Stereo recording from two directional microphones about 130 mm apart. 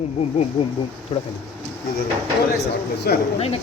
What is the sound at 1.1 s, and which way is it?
Speech, 40° left (ahead or behind).